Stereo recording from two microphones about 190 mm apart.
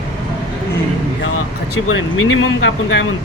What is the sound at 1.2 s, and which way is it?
Speech, 90° left.